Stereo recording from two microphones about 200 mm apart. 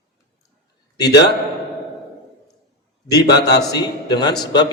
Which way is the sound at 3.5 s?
20° left (ahead or behind).